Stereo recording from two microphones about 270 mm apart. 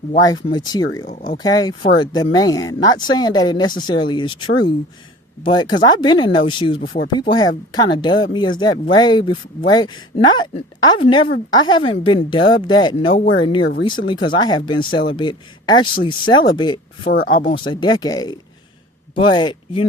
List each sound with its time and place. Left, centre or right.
0.2 s a woman's voice: centre
1.0 s speech: left
1.4 s a woman's voice: centre
13.1 s speech: left
13.4 s a woman's voice: centre